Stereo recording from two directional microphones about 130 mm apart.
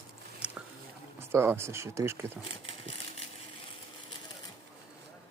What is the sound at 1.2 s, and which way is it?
Speech, 20° right (ahead or behind).